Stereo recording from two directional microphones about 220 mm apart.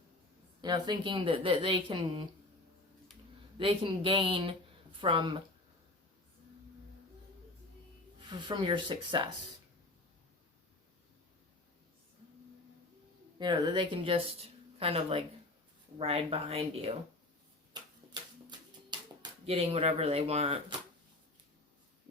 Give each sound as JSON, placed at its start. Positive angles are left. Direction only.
{"t": 0.6, "sound": "a woman's voice", "side_deg": -20}
{"t": 3.6, "sound": "a woman's voice", "side_deg": -25}
{"t": 8.3, "sound": "a woman's voice", "side_deg": -20}
{"t": 13.4, "sound": "a woman's voice", "side_deg": -20}
{"t": 18.9, "sound": "speech", "side_deg": -25}